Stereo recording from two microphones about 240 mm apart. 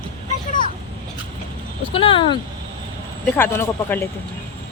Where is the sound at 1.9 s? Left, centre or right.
Left.